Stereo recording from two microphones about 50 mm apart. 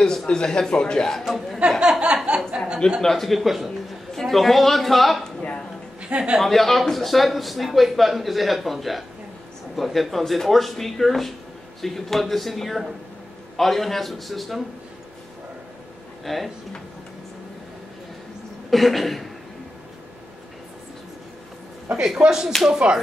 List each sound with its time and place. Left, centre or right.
0.0 s a man's voice: centre
1.2 s a man's voice: centre
1.8 s a sound: centre
3.0 s a man's voice: centre
6.0 s speech: right
6.4 s a man's voice: centre
16.3 s a man's voice: centre
18.7 s a man's voice: centre
21.9 s speech: centre